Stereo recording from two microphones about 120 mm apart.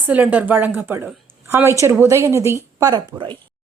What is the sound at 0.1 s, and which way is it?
A woman's voice, 15° right (ahead or behind).